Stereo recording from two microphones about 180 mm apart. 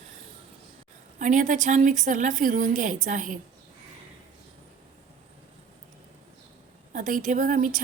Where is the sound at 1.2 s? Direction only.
45° right (ahead or behind).